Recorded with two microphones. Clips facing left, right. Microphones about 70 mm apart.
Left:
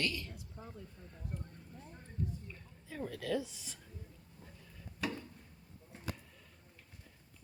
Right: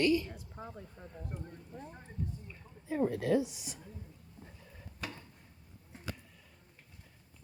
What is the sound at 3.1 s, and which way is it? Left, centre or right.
Speech, right.